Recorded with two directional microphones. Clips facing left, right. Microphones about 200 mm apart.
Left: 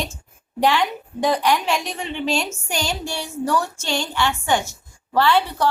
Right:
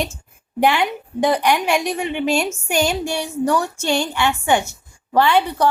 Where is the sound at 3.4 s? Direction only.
15° right (ahead or behind).